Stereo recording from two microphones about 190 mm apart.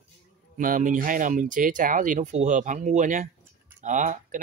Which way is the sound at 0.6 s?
45° right (ahead or behind).